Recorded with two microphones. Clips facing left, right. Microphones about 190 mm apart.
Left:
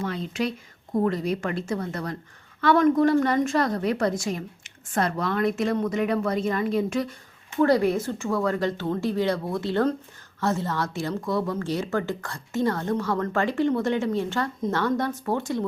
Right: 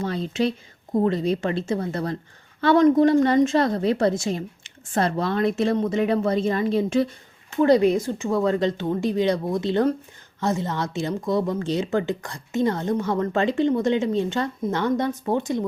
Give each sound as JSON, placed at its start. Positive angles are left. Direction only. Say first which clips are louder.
{"t": 0.0, "sound": "a woman's voice", "louder": "right 4 dB", "side_deg": -35}